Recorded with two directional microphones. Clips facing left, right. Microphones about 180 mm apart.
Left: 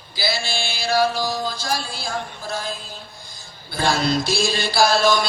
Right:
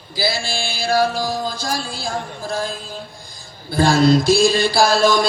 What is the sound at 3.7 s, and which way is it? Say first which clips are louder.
Music: right 7 dB; 40° right (ahead or behind).